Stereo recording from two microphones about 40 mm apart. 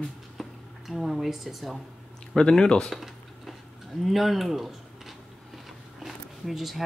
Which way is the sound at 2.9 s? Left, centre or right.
Centre.